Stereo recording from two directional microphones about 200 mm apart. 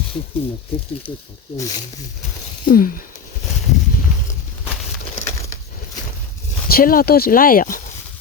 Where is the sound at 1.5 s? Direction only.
15° left (ahead or behind).